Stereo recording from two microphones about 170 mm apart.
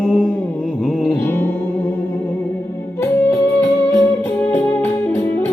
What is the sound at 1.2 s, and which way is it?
Music, 10° left (ahead or behind).